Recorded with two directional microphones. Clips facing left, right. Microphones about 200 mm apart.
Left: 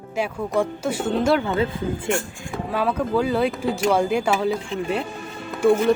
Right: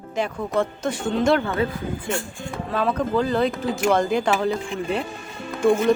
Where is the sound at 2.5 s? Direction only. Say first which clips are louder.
Even; 5° left (ahead or behind).